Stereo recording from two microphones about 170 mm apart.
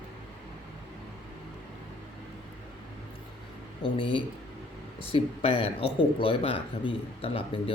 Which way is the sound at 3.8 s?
30° left (ahead or behind).